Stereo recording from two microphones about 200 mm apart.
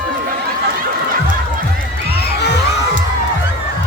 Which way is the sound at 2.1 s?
55° left (ahead or behind).